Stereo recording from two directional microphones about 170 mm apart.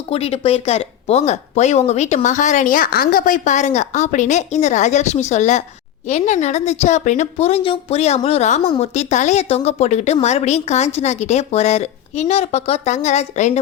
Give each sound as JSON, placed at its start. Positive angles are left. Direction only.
{"t": 0.1, "sound": "a woman's voice", "side_deg": 35}